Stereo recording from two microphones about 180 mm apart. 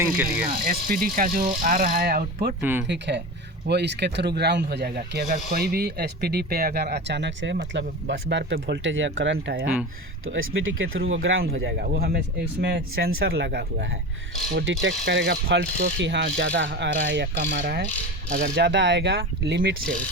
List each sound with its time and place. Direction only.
0.0 s speech: 10° right (ahead or behind)
0.6 s speech: 50° right (ahead or behind)
2.6 s speech: 10° right (ahead or behind)
2.8 s ratchet: 75° right (ahead or behind)
4.4 s speech: 70° right (ahead or behind)
10.4 s speech: 90° right
11.5 s speech: 60° right (ahead or behind)
14.5 s ratchet: 90° right